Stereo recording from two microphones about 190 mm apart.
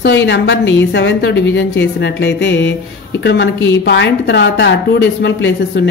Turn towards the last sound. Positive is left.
turn(degrees=65)  # may be behind; listen again after turning